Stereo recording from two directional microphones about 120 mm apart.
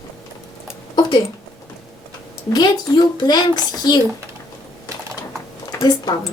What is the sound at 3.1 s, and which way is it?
Speech, 35° left (ahead or behind).